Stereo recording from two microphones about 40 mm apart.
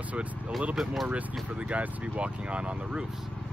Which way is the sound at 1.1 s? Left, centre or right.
Right.